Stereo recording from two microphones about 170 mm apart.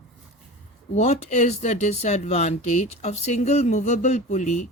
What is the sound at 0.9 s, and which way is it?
Speech, 40° left (ahead or behind).